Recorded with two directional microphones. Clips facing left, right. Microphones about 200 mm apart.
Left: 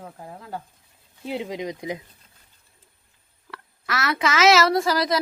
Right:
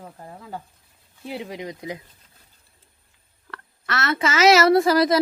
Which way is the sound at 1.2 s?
20° left (ahead or behind).